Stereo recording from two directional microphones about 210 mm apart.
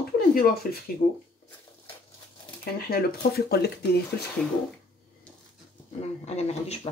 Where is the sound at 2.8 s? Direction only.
45° left (ahead or behind).